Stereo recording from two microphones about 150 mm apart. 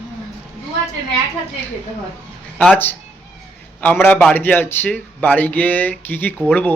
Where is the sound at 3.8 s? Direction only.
15° left (ahead or behind).